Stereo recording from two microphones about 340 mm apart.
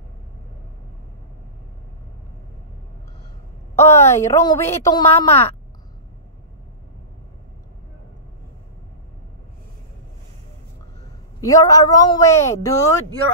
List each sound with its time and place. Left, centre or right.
3.7 s a woman's voice: centre
11.4 s a woman's voice: centre